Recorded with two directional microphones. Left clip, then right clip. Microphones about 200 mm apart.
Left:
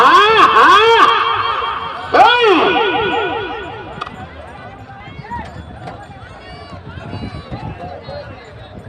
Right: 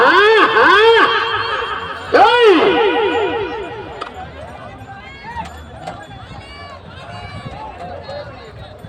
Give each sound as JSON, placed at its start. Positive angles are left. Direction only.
{"t": 0.0, "sound": "snicker", "side_deg": -20}